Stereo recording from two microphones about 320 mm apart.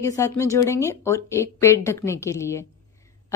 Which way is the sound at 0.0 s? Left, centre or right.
Centre.